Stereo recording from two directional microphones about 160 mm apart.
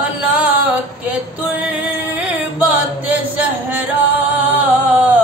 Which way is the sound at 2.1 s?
10° right (ahead or behind).